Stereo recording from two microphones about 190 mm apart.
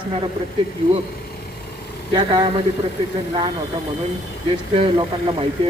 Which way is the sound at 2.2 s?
25° right (ahead or behind).